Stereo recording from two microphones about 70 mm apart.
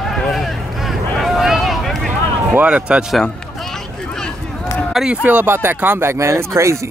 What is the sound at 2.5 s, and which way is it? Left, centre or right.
Speech, centre.